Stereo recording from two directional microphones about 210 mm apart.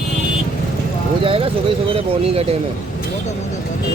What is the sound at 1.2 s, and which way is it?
Speech, 25° right (ahead or behind).